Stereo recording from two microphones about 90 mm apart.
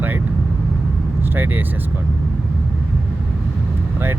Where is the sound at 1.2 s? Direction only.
20° right (ahead or behind).